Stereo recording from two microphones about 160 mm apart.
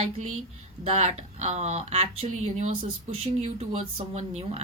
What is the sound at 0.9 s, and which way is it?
Speech, 45° right (ahead or behind).